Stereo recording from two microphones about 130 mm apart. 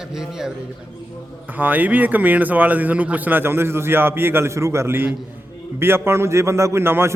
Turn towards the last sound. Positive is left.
turn(degrees=-20)  # may be behind; listen again after turning